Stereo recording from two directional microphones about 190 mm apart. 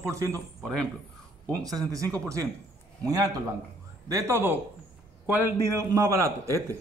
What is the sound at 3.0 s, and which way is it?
A man's voice, 20° right (ahead or behind).